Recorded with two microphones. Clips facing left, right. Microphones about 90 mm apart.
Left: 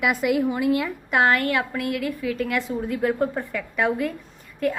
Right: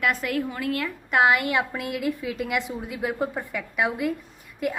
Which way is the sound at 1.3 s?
15° right (ahead or behind).